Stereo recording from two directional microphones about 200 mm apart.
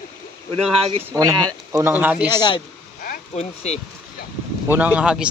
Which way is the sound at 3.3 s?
30° left (ahead or behind).